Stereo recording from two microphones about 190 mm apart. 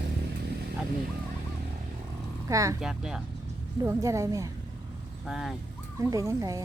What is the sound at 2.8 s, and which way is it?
Speech, 5° right (ahead or behind).